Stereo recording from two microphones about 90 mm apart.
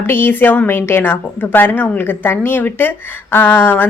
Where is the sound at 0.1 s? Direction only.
25° left (ahead or behind).